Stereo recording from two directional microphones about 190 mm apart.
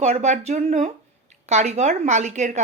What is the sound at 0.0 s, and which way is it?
A woman's voice, 35° right (ahead or behind).